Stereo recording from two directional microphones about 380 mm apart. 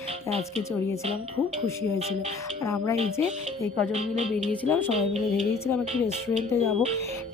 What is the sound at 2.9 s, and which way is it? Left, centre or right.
Speech, centre.